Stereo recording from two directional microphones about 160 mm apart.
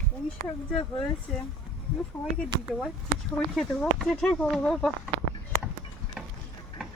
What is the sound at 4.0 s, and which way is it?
Speech, centre (ahead or behind).